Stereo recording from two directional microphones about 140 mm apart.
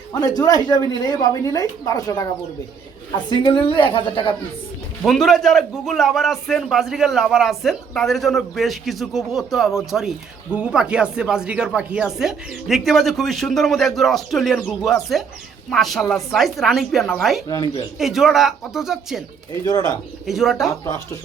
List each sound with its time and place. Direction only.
0.1 s a woman's voice: 25° left (ahead or behind)
3.2 s a woman's voice: 35° left (ahead or behind)
5.0 s a man's voice: centre (ahead or behind)
17.5 s a woman's voice: 30° left (ahead or behind)
18.0 s a man's voice: centre (ahead or behind)
19.6 s a woman's voice: 30° left (ahead or behind)
20.2 s a man's voice: centre (ahead or behind)
20.7 s a woman's voice: 25° left (ahead or behind)